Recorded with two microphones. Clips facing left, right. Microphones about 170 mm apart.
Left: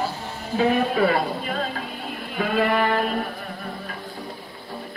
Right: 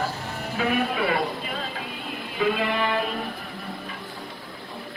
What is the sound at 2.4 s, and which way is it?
Speech, 50° left (ahead or behind).